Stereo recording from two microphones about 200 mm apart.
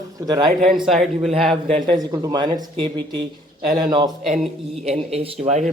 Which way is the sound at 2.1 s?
20° right (ahead or behind).